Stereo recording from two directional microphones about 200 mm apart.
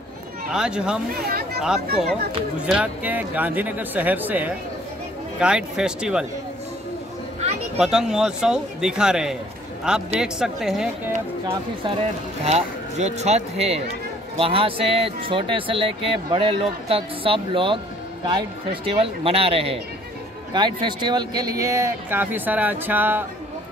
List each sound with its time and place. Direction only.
0.5 s a man's voice: 5° right (ahead or behind)
1.1 s speech: 50° right (ahead or behind)
2.6 s a man's voice: 5° right (ahead or behind)
7.3 s a sound: 30° right (ahead or behind)
7.8 s a man's voice: 5° right (ahead or behind)
12.4 s speech: 35° right (ahead or behind)
18.9 s speech: 25° right (ahead or behind); by 23.2 s 10° right (ahead or behind)